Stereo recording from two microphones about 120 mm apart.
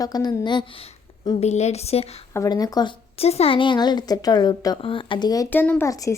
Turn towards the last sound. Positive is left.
turn(degrees=30)  # may be behind; listen again after turning